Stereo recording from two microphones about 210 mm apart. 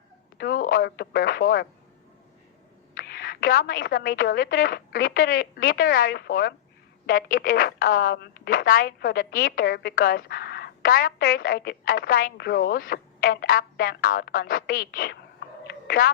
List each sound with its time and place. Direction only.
0.3 s speech: 45° left (ahead or behind)
2.9 s a woman's voice: 45° left (ahead or behind)